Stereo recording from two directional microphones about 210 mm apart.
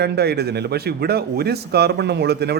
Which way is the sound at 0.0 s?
50° right (ahead or behind).